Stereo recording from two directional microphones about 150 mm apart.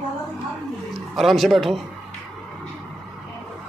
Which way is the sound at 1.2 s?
Centre (ahead or behind).